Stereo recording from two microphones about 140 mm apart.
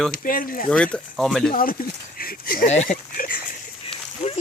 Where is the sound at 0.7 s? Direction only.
5° left (ahead or behind).